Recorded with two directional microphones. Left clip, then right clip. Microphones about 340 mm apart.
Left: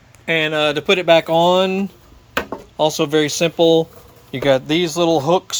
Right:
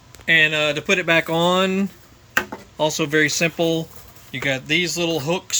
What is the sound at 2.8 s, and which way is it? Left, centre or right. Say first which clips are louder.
Speech: left 2 dB; centre.